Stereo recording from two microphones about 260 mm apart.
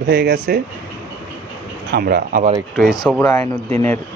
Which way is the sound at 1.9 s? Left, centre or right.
Right.